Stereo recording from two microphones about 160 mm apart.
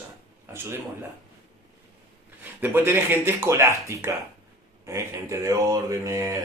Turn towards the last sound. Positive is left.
turn(degrees=-20)  # may be behind; listen again after turning